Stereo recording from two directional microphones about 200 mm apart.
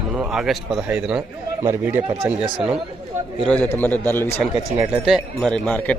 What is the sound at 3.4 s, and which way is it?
Speech, 10° left (ahead or behind).